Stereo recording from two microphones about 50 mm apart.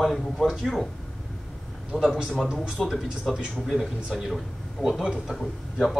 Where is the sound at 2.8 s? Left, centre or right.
Centre.